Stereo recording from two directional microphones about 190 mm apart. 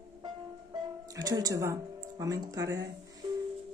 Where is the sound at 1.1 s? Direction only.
20° right (ahead or behind).